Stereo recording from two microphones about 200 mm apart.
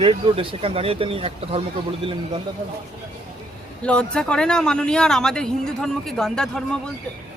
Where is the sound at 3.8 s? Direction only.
5° left (ahead or behind).